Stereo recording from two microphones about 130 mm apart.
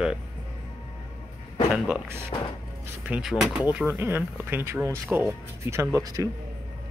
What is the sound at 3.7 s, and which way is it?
Speech, 15° right (ahead or behind).